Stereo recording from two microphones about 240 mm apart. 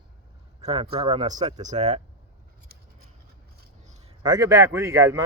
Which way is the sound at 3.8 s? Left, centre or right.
Right.